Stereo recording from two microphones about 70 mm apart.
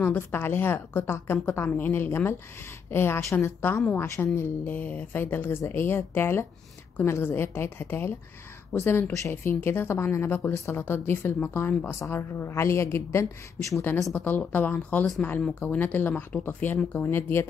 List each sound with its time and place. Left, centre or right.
0.0 s a woman's voice: left
14.1 s speech: left